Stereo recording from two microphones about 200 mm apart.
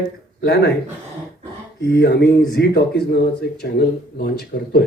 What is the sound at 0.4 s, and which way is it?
Speech, 55° left (ahead or behind).